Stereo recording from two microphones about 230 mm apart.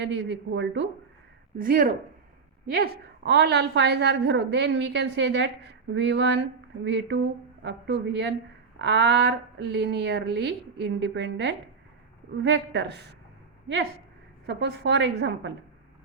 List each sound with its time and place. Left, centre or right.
0.0 s a woman's voice: right
1.6 s a woman's voice: right
14.4 s a woman's voice: right